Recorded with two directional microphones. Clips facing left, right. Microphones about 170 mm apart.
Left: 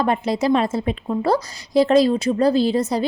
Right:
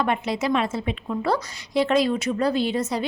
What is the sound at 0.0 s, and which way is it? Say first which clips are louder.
A woman's voice: left 4 dB; 35° left (ahead or behind).